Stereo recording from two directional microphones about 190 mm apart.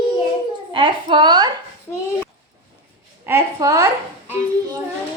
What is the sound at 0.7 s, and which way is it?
Speech, 25° right (ahead or behind).